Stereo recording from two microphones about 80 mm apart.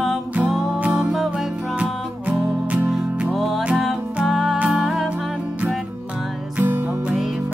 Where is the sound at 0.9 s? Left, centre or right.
Centre.